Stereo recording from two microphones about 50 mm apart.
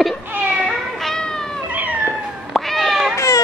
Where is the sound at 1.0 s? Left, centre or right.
Centre.